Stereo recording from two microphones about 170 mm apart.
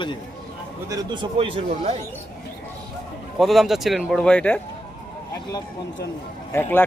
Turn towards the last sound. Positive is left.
turn(degrees=15)  # may be behind; listen again after turning